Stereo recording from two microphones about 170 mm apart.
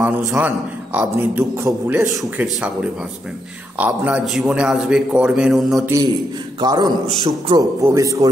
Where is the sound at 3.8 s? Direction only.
5° right (ahead or behind).